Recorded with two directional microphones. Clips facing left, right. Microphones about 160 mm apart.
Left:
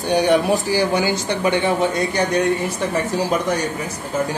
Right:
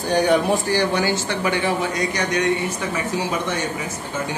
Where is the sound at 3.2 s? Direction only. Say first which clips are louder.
Left 5 dB; 35° left (ahead or behind).